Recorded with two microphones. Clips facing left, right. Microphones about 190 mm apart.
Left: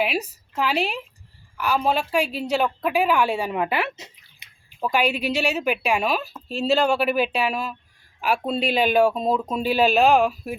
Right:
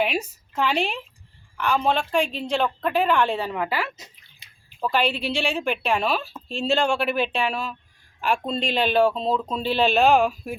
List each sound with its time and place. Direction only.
0.5 s a woman's voice: 5° left (ahead or behind)
3.5 s speech: 20° left (ahead or behind)
4.8 s speech: 10° left (ahead or behind)